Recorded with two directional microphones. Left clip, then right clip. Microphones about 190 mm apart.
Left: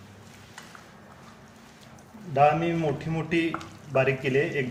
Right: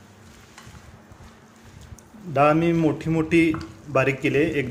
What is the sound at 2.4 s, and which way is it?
Speech, 40° right (ahead or behind).